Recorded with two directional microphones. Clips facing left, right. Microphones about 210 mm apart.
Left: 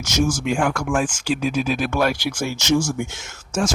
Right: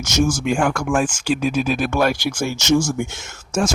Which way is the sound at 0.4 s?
45° right (ahead or behind).